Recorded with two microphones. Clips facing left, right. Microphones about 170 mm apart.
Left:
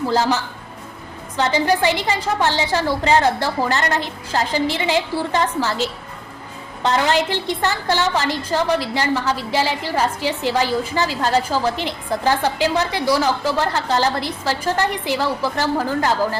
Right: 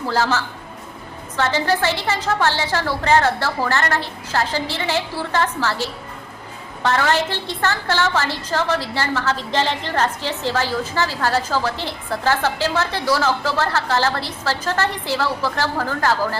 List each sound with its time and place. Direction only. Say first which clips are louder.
0.1 s a woman's voice: right 1 dB; 15° left (ahead or behind)